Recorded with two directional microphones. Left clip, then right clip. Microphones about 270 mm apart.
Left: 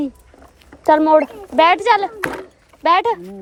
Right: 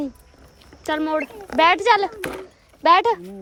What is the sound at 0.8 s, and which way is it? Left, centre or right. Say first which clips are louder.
Speech: left 11 dB; centre.